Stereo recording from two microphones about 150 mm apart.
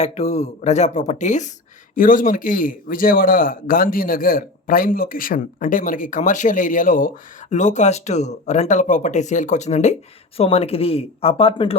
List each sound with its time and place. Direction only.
0.0 s a man's voice: 50° left (ahead or behind)
7.5 s speech: 50° left (ahead or behind)